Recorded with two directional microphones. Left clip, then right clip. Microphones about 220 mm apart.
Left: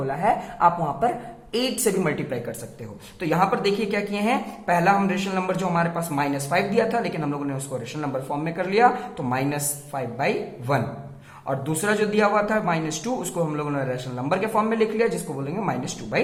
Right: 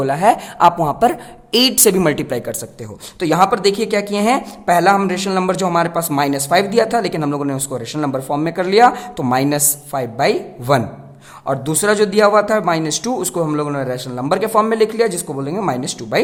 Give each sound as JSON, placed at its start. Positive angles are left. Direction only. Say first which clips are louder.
{"t": 0.0, "sound": "a woman's voice", "louder": "right 9 dB", "side_deg": -50}